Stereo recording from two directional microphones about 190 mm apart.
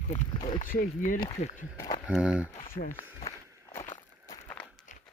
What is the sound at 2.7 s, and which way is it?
Speech, 45° left (ahead or behind).